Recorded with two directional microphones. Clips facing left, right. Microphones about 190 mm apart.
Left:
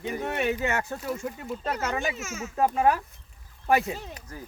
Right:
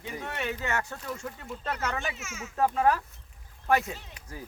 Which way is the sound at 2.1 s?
40° left (ahead or behind).